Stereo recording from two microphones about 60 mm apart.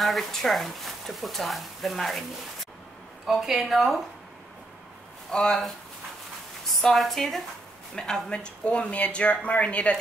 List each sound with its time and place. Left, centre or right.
0.0 s speech: centre
3.3 s speech: centre
5.3 s speech: centre
6.8 s speech: centre; by 9.9 s left